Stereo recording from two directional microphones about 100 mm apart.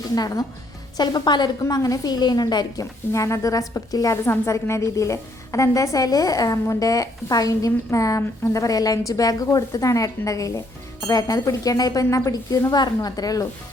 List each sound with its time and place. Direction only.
0.1 s a woman's voice: 35° left (ahead or behind)
3.1 s a woman's voice: 30° left (ahead or behind)